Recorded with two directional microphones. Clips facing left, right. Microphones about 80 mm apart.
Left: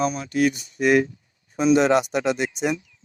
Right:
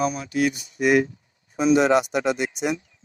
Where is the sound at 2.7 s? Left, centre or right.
Right.